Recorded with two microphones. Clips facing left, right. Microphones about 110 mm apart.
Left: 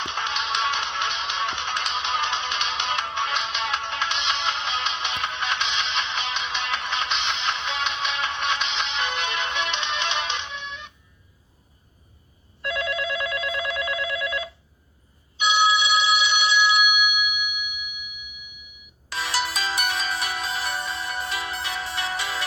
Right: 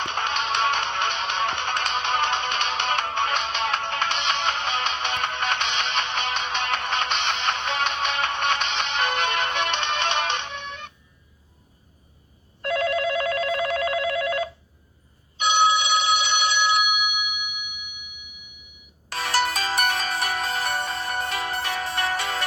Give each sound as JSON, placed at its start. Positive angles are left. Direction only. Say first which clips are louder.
{"t": 0.0, "sound": "music", "louder": "right 2 dB", "side_deg": -45}
{"t": 12.6, "sound": "telephone bell ringing", "louder": "right 4 dB", "side_deg": -45}
{"t": 19.1, "sound": "music", "louder": "right 3 dB", "side_deg": -50}